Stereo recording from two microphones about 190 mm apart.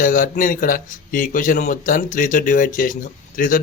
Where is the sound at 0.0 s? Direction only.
45° left (ahead or behind).